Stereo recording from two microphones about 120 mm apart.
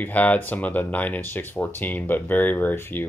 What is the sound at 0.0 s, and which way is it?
Speech, 15° left (ahead or behind).